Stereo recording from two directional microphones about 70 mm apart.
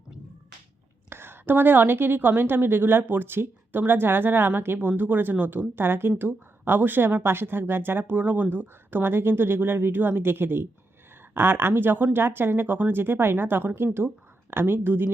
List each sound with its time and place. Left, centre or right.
1.1 s a woman's voice: right